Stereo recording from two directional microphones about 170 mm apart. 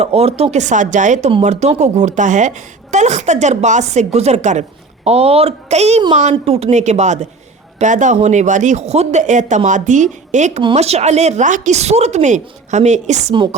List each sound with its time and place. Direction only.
0.0 s a woman's voice: 35° right (ahead or behind)
10.6 s a woman's voice: 35° right (ahead or behind)